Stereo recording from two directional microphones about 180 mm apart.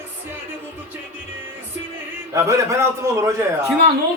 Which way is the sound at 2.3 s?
15° right (ahead or behind).